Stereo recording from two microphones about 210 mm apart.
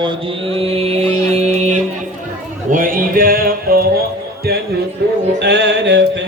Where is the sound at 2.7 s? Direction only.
40° right (ahead or behind).